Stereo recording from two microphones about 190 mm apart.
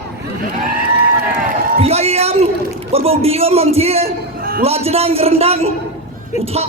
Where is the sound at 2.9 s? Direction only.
30° right (ahead or behind).